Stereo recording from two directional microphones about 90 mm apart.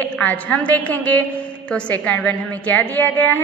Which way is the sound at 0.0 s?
15° left (ahead or behind).